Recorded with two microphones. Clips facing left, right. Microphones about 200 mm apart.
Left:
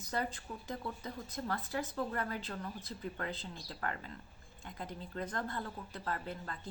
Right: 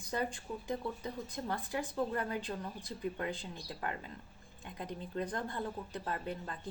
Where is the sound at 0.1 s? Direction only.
15° right (ahead or behind).